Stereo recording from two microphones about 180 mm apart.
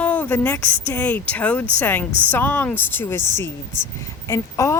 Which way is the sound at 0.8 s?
10° left (ahead or behind).